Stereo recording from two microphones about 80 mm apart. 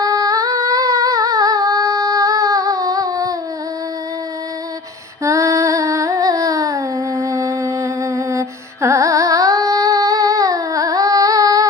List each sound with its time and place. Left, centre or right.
0.0 s singing: right
5.2 s singing: right